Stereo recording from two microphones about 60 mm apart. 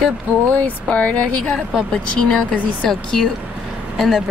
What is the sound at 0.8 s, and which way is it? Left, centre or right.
Speech, left.